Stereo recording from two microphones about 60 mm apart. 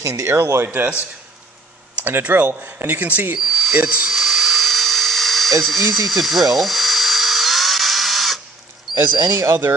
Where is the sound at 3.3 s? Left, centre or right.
Centre.